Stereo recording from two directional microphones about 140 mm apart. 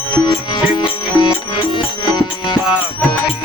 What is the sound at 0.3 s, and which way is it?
Music, 30° left (ahead or behind).